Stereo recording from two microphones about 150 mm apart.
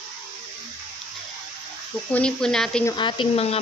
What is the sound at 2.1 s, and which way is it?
Speech, 5° left (ahead or behind).